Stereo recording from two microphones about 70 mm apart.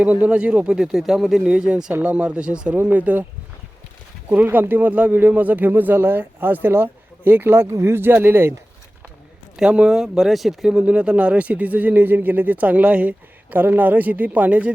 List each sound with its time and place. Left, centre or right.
0.0 s speech: right; by 1.4 s centre
1.5 s speech: centre
4.3 s speech: right
9.6 s speech: centre
10.8 s speech: centre